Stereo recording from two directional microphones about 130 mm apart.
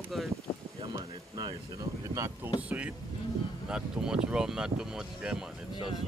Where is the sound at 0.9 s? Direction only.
30° right (ahead or behind).